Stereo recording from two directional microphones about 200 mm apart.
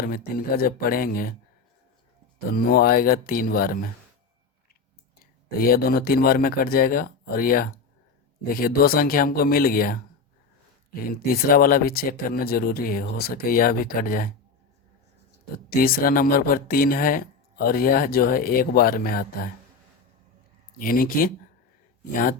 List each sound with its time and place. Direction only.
0.0 s speech: 45° left (ahead or behind)
2.5 s speech: 45° left (ahead or behind)
5.2 s speech: 50° left (ahead or behind)
11.1 s speech: 45° left (ahead or behind)
15.7 s speech: 45° left (ahead or behind)
20.7 s speech: 45° left (ahead or behind)